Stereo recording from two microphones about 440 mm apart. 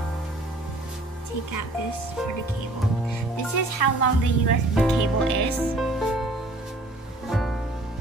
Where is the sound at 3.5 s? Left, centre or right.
Left.